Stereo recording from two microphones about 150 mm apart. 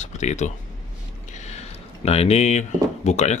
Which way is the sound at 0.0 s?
50° left (ahead or behind).